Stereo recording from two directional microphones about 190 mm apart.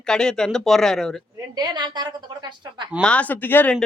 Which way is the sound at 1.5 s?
20° right (ahead or behind).